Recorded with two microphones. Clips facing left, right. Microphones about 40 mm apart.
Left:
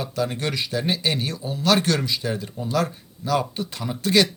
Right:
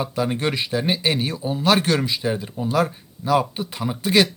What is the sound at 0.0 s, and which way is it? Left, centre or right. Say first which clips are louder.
A man's voice: right 3 dB; centre.